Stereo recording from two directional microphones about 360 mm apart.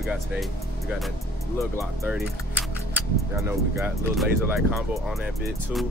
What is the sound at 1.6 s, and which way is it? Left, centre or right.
Speech, centre.